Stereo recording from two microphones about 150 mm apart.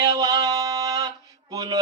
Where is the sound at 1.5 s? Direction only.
25° right (ahead or behind).